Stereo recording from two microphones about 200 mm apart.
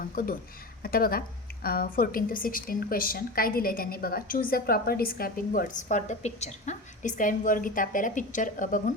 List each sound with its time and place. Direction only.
0.0 s a woman's voice: 45° left (ahead or behind)